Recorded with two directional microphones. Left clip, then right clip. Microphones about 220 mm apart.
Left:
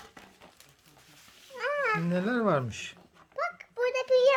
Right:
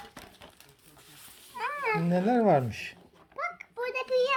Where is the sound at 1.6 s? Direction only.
35° left (ahead or behind).